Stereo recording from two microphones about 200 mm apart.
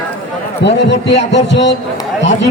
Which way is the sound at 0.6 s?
60° left (ahead or behind).